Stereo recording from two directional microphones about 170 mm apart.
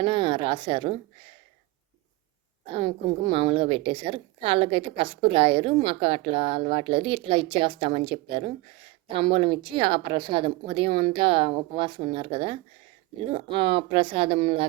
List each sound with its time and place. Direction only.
0.0 s a woman's voice: 30° right (ahead or behind)
2.7 s a woman's voice: 30° right (ahead or behind)